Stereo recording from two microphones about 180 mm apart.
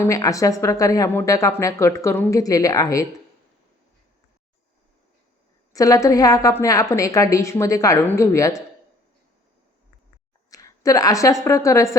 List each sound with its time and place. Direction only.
0.0 s speech: 20° left (ahead or behind)
5.7 s speech: 20° left (ahead or behind)
10.5 s a sound: 20° left (ahead or behind)
11.4 s speech: 15° left (ahead or behind)